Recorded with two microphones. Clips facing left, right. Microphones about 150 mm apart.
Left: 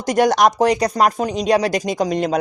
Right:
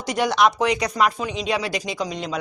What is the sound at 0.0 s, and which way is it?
A man's voice, 45° left (ahead or behind).